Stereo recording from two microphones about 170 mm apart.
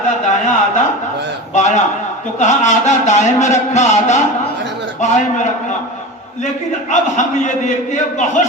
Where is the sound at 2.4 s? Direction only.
45° left (ahead or behind).